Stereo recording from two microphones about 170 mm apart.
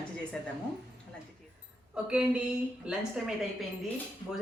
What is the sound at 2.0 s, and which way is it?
Speech, 5° right (ahead or behind).